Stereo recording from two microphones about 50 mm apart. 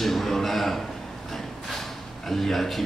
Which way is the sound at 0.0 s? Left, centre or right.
Centre.